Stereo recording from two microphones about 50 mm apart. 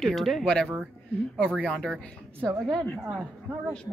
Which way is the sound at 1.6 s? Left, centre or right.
Centre.